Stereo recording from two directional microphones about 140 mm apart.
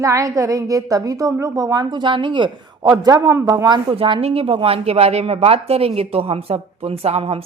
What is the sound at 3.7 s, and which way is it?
A woman's voice, 35° right (ahead or behind).